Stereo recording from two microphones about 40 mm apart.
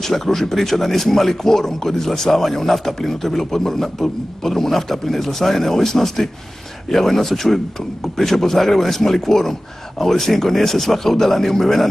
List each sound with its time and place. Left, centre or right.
0.0 s speech: centre